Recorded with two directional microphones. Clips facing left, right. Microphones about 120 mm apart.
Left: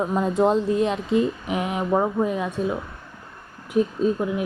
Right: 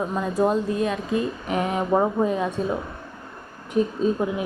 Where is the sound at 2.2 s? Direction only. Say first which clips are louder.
Right 1 dB; 5° left (ahead or behind).